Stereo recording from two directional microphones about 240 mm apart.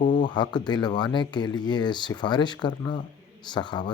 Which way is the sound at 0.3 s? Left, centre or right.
Centre.